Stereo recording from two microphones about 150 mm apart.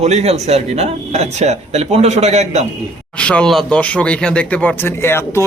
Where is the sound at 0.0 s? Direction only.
45° right (ahead or behind).